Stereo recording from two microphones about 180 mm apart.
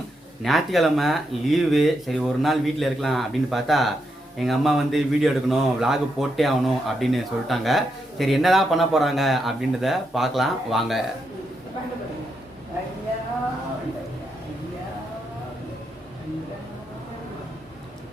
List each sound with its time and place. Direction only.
0.4 s speech: centre (ahead or behind)